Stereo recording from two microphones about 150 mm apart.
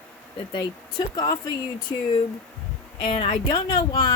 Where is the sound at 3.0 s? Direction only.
35° left (ahead or behind).